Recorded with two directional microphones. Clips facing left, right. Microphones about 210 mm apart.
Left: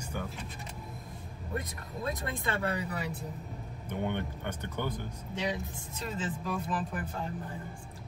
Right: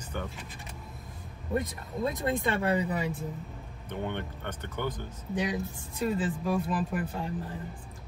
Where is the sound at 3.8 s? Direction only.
15° left (ahead or behind).